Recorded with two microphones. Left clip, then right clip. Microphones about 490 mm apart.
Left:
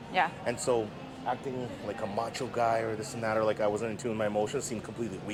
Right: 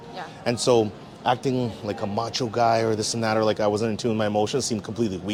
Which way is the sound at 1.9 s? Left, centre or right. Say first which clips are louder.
Right 2 dB; right.